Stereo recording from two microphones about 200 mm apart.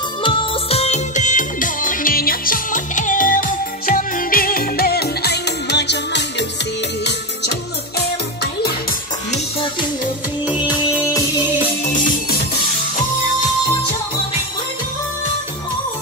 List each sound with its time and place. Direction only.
0.2 s music: 30° left (ahead or behind); by 6.2 s 60° left (ahead or behind)
9.3 s music: 25° left (ahead or behind)
10.4 s music: 5° right (ahead or behind)
11.9 s music: 40° left (ahead or behind)